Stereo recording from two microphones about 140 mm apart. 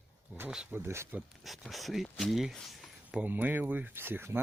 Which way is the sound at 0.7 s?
20° right (ahead or behind).